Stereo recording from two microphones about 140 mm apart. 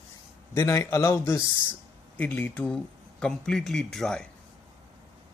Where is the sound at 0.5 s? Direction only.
20° left (ahead or behind); by 4.3 s 5° left (ahead or behind).